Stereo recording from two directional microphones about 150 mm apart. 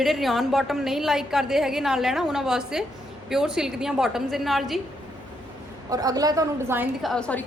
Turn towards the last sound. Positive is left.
turn(degrees=5)  # may be behind; listen again after turning